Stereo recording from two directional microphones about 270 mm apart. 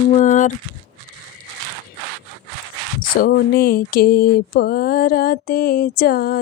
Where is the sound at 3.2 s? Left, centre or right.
Left.